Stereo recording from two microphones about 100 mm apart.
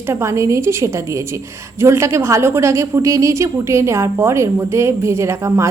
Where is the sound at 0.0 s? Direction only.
25° right (ahead or behind).